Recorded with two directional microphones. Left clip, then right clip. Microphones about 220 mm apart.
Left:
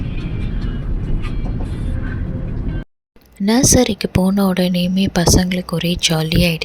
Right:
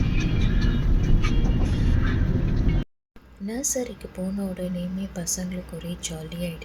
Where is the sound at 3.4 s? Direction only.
45° left (ahead or behind).